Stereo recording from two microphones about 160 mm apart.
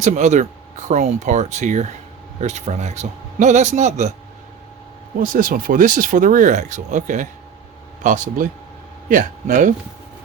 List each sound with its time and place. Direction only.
0.0 s a man's voice: 45° right (ahead or behind)
5.2 s a man's voice: 60° right (ahead or behind)